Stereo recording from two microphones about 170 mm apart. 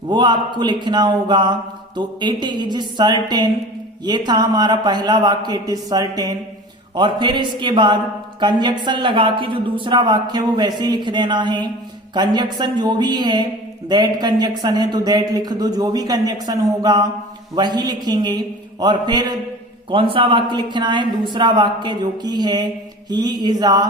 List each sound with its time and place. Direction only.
0.1 s speech: 25° right (ahead or behind)